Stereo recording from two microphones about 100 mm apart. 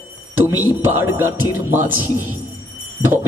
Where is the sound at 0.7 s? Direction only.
25° right (ahead or behind).